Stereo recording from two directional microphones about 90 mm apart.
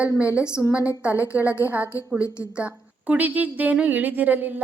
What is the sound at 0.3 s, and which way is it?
Speech, 30° left (ahead or behind).